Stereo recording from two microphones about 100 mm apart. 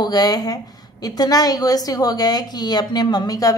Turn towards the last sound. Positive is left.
turn(degrees=40)  # may be behind; listen again after turning